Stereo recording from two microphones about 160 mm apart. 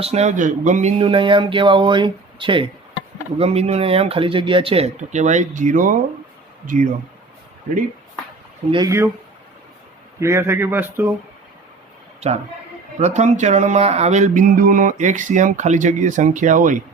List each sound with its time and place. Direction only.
0.0 s speech: 40° right (ahead or behind)
6.7 s music: 55° right (ahead or behind)
8.7 s speech: 20° right (ahead or behind)
10.2 s speech: 15° right (ahead or behind)
13.0 s music: 45° right (ahead or behind)